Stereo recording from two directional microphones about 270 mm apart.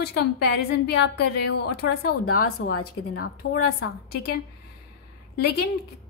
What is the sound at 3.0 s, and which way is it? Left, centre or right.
Speech, left.